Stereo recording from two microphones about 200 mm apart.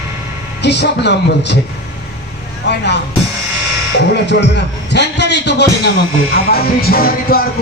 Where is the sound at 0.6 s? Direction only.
60° left (ahead or behind).